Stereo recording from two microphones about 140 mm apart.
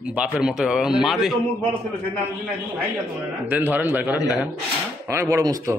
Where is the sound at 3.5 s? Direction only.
10° right (ahead or behind).